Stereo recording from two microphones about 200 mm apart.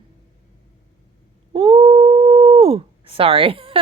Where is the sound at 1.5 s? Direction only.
30° right (ahead or behind).